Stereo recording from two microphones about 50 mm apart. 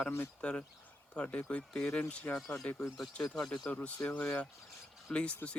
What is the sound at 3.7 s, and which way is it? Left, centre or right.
Speech, left.